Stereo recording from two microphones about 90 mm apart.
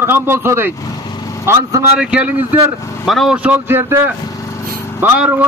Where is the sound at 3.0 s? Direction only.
Centre (ahead or behind).